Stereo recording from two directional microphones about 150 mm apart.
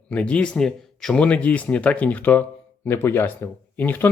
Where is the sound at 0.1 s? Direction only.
10° left (ahead or behind).